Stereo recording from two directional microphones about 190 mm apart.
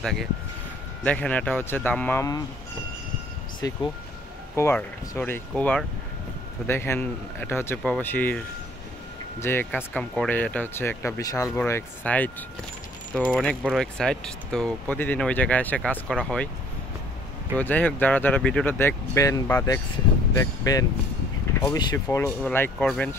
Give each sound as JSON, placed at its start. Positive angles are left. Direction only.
{"t": 0.0, "sound": "speech", "side_deg": 0}
{"t": 3.6, "sound": "speech", "side_deg": 20}
{"t": 9.4, "sound": "speech", "side_deg": 10}
{"t": 17.6, "sound": "speech", "side_deg": 10}